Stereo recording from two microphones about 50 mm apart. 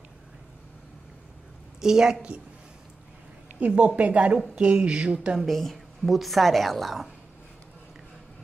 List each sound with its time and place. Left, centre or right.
1.8 s a woman's voice: centre
3.5 s speech: right
5.5 s a woman's voice: centre